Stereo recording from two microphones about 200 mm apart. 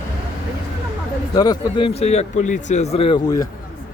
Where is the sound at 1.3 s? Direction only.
20° left (ahead or behind); by 2.8 s 35° left (ahead or behind).